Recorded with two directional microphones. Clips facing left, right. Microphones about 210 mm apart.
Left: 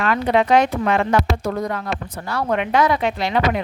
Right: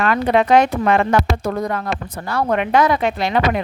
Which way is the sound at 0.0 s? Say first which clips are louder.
Right 2 dB; 50° right (ahead or behind).